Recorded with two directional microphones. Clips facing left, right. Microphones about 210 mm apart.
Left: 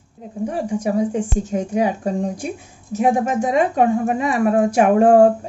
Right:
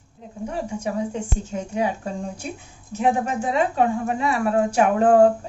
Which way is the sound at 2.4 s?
10° left (ahead or behind).